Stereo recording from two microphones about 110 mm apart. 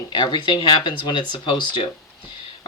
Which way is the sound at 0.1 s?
45° left (ahead or behind).